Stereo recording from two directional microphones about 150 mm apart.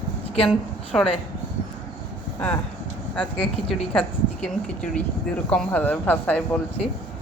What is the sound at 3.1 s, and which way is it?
Speech, 5° left (ahead or behind).